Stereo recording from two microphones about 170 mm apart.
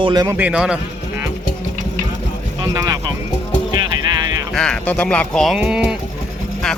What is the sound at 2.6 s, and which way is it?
Speech, 20° right (ahead or behind).